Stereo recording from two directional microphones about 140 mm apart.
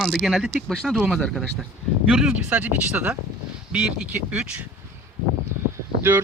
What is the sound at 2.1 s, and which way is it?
Speech, 10° right (ahead or behind).